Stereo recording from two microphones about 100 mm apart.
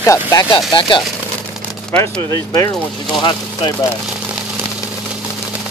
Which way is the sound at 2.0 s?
35° left (ahead or behind).